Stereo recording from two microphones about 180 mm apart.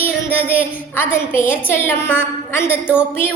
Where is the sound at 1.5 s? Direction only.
10° left (ahead or behind).